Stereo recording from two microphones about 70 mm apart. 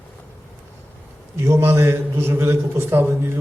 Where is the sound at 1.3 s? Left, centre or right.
Right.